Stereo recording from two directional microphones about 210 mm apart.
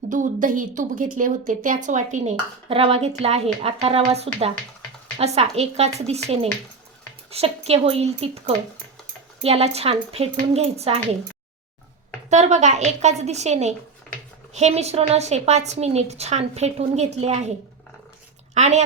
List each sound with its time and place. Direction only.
0.1 s a woman's voice: 40° right (ahead or behind)
12.3 s a woman's voice: 35° right (ahead or behind)
18.5 s a woman's voice: 35° right (ahead or behind)